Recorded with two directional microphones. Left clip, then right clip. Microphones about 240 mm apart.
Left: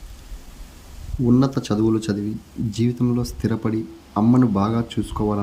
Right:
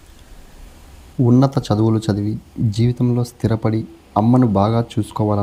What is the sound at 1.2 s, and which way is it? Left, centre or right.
Speech, centre.